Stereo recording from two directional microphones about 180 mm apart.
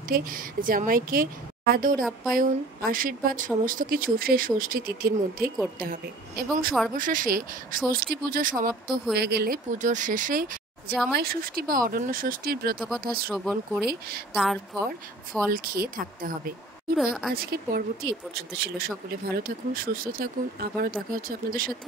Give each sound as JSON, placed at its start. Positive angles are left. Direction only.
{"t": 0.1, "sound": "speech", "side_deg": -50}
{"t": 9.1, "sound": "speech", "side_deg": -60}
{"t": 9.8, "sound": "speech", "side_deg": -45}
{"t": 12.7, "sound": "speech", "side_deg": 0}
{"t": 13.0, "sound": "speech", "side_deg": -55}
{"t": 13.3, "sound": "speech", "side_deg": 0}
{"t": 15.5, "sound": "speech", "side_deg": -55}
{"t": 16.9, "sound": "speech", "side_deg": 0}
{"t": 17.3, "sound": "speech", "side_deg": -55}